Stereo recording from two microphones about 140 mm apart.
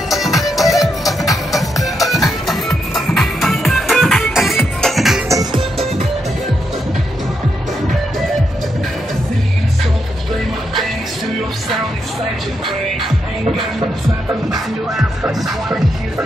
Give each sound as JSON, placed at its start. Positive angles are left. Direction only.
{"t": 0.1, "sound": "music", "side_deg": 0}
{"t": 5.3, "sound": "music", "side_deg": -25}
{"t": 15.4, "sound": "music", "side_deg": -5}